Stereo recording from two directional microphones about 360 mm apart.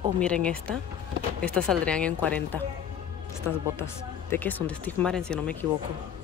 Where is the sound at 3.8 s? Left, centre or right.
Centre.